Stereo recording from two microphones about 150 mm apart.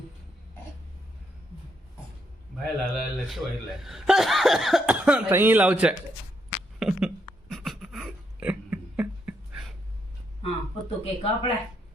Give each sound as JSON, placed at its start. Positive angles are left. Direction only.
{"t": 2.9, "sound": "speech", "side_deg": 0}
{"t": 6.7, "sound": "a sound", "side_deg": -5}
{"t": 10.4, "sound": "speech", "side_deg": 40}